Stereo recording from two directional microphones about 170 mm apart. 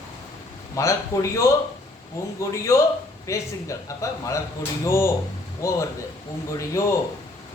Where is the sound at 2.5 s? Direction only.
15° left (ahead or behind).